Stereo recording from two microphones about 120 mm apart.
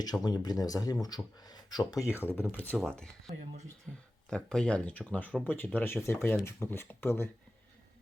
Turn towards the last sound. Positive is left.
turn(degrees=20)  # may be behind; listen again after turning